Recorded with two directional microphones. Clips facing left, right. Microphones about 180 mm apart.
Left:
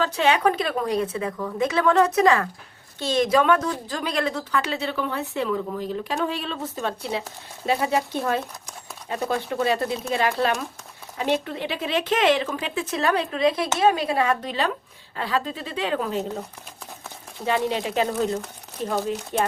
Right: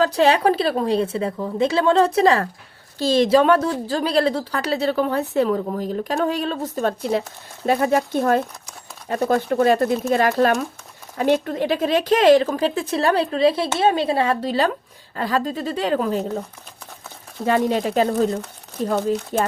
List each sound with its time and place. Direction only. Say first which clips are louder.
0.0 s a woman's voice: right 4 dB; 35° right (ahead or behind)
17.4 s a woman's voice: right 5 dB; 45° right (ahead or behind)